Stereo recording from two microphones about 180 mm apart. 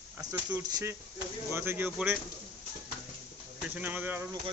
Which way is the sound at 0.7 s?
15° right (ahead or behind).